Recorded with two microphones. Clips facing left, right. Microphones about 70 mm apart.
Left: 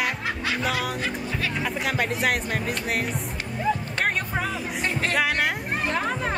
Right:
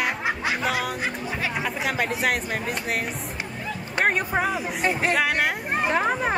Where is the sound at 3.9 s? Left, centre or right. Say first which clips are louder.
Right 3 dB; centre.